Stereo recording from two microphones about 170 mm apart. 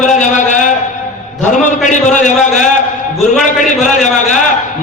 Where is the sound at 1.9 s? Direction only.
45° left (ahead or behind).